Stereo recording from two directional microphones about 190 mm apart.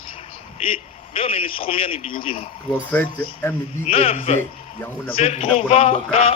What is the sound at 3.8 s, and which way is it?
A man's voice, 30° left (ahead or behind).